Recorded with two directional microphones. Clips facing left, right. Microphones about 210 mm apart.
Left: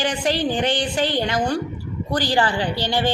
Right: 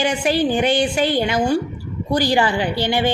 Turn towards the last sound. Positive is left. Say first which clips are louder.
# right 3 dB
turn(degrees=-15)  # may be behind; listen again after turning